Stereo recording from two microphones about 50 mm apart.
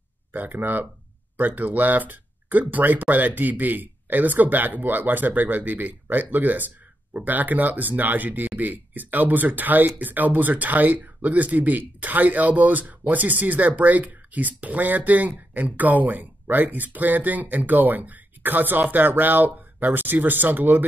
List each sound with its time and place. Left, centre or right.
0.3 s speech: right